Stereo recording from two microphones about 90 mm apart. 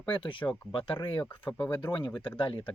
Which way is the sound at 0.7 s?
85° left.